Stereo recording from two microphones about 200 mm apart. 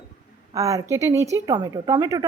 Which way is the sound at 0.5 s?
15° right (ahead or behind).